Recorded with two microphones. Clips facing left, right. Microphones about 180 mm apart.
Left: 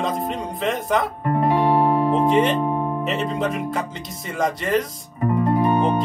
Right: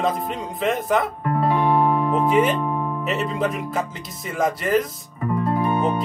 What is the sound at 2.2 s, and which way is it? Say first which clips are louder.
Speech: left 1 dB; 5° right (ahead or behind).